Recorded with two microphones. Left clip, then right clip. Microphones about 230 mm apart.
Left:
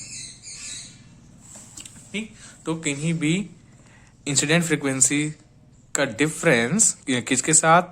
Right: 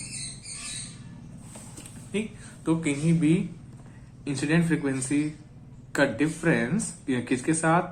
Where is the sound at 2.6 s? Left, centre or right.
Left.